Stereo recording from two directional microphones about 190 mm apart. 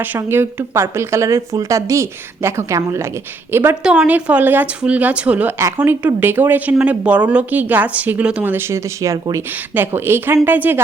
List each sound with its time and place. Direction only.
0.0 s a woman's voice: 10° right (ahead or behind)